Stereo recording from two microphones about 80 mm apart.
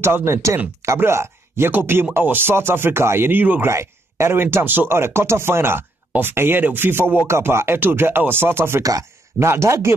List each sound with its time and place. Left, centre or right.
0.0 s speech: right
3.7 s speech: right
8.8 s speech: right